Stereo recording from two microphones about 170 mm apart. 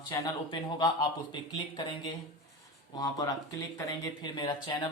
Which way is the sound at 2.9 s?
20° left (ahead or behind).